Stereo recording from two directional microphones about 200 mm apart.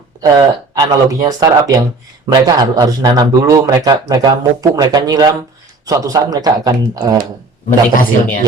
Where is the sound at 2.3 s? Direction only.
20° right (ahead or behind).